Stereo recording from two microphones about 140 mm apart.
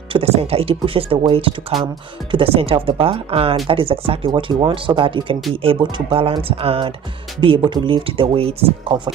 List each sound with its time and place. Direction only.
0.1 s speech: 45° right (ahead or behind)